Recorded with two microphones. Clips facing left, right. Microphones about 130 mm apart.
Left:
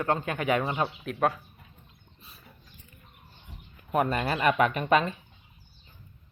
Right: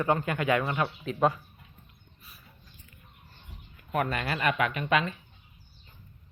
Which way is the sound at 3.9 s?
30° left (ahead or behind).